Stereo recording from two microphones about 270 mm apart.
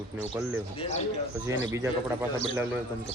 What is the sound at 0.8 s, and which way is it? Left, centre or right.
Speech, left.